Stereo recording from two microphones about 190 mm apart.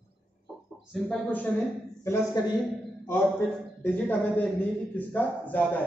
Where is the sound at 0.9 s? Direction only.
5° left (ahead or behind).